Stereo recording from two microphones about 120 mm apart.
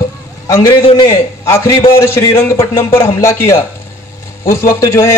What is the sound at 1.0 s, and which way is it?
A man's voice, 25° left (ahead or behind).